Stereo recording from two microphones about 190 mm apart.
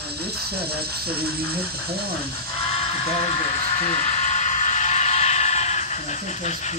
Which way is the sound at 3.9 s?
40° left (ahead or behind).